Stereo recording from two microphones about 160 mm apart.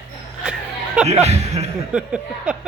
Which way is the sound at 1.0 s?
40° right (ahead or behind).